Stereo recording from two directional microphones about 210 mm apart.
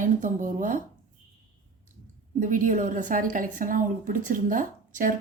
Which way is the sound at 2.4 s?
40° right (ahead or behind).